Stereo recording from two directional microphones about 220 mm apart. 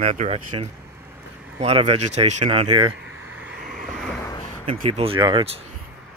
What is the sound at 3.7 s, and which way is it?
Vehicle, centre (ahead or behind).